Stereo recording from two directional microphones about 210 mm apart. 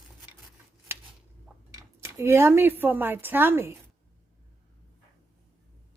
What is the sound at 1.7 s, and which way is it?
Speech, 10° right (ahead or behind).